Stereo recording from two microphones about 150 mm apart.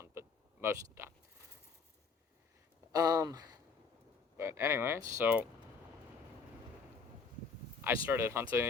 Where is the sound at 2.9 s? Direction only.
25° right (ahead or behind).